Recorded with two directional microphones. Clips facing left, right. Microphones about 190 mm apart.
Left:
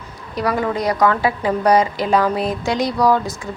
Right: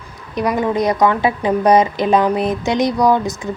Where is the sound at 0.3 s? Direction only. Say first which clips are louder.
Right 3 dB; 20° right (ahead or behind).